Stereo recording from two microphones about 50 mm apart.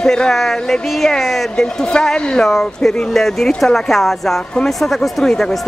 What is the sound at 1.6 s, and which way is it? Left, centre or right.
Speech, centre.